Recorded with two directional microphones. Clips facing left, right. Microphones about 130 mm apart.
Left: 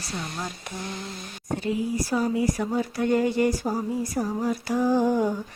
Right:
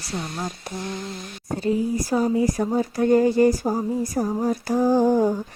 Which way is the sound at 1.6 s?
35° right (ahead or behind).